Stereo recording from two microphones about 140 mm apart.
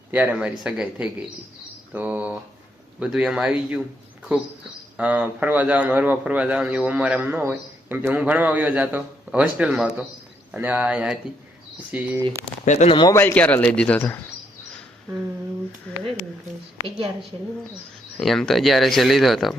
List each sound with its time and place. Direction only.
0.1 s a man's voice: 10° right (ahead or behind)
4.9 s a man's voice: 10° right (ahead or behind)
12.6 s speech: 55° left (ahead or behind)
12.9 s speech: 35° left (ahead or behind)
13.1 s speech: 15° left (ahead or behind)
18.2 s speech: centre (ahead or behind)